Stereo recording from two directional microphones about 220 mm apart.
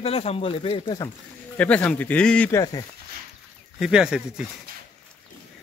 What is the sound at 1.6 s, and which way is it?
Speech, 5° left (ahead or behind).